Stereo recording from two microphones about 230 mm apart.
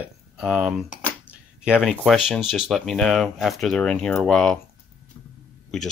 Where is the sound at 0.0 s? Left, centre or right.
Centre.